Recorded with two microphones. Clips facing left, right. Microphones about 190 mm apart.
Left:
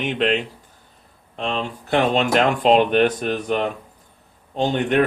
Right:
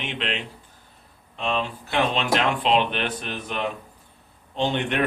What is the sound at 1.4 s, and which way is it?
Speech, 45° left (ahead or behind).